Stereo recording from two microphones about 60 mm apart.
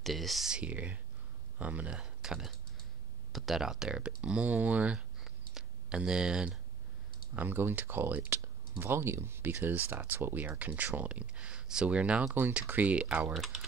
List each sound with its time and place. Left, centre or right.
0.0 s speech: centre
0.5 s speech: centre
4.0 s speech: centre
4.9 s a sound: centre
7.3 s speech: right
13.3 s speech: centre